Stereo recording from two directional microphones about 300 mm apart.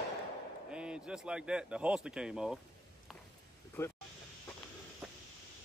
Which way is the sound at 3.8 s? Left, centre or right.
Centre.